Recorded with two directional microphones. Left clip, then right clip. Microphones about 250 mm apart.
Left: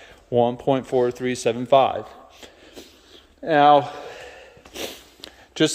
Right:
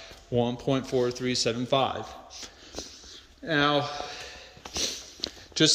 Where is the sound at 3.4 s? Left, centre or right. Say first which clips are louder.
Left 10 dB; centre.